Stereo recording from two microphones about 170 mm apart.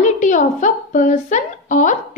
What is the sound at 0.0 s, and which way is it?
A woman's voice, 45° left (ahead or behind).